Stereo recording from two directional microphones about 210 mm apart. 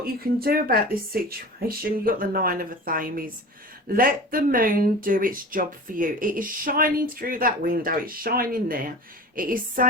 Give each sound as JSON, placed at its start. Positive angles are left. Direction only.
{"t": 0.0, "sound": "speech", "side_deg": -45}